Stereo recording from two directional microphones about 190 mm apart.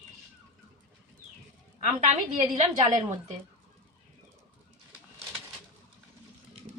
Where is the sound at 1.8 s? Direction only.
35° right (ahead or behind).